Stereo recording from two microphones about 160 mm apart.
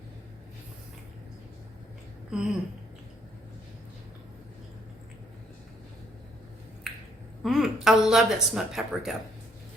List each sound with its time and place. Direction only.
2.3 s speech: 5° right (ahead or behind)
7.4 s speech: centre (ahead or behind)